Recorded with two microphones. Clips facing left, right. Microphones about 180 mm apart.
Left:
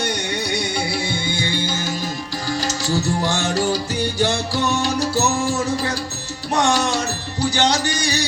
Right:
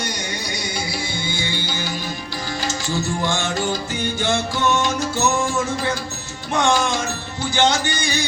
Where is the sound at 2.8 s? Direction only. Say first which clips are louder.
Left 2 dB; 40° left (ahead or behind).